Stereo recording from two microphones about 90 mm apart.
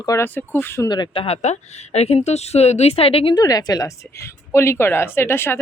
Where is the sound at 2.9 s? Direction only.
90° left.